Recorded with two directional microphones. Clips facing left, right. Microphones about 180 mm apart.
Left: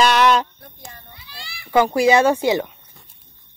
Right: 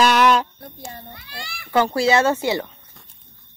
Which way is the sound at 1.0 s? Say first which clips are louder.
Right 5 dB; 50° right (ahead or behind).